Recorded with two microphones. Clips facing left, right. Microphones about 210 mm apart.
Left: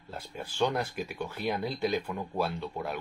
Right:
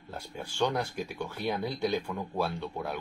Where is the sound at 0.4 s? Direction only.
5° left (ahead or behind).